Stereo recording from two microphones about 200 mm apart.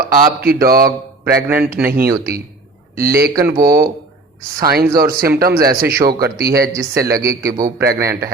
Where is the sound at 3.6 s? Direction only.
50° right (ahead or behind).